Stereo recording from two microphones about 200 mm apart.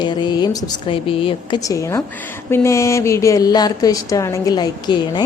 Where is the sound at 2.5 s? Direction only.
15° left (ahead or behind).